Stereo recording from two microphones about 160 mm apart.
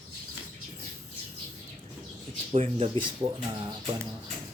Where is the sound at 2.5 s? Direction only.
40° right (ahead or behind).